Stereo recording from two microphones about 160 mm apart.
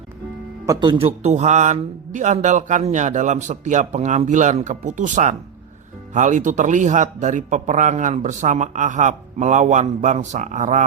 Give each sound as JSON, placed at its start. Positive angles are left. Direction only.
{"t": 0.6, "sound": "a man's voice", "side_deg": -25}